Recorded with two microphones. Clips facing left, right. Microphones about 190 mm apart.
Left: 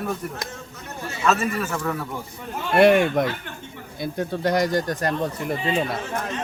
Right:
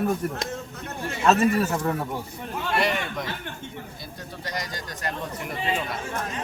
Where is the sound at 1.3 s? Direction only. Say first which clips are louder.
Right 3 dB; 35° right (ahead or behind).